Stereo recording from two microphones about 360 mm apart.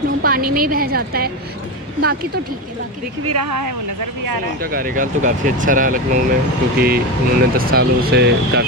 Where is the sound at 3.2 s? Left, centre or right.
Right.